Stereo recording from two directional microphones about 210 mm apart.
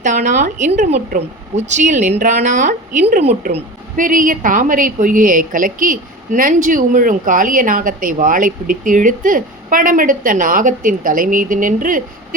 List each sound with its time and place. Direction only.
0.0 s a woman's voice: 35° right (ahead or behind)